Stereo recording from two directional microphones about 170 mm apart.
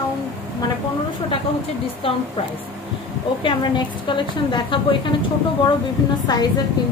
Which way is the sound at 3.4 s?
25° left (ahead or behind).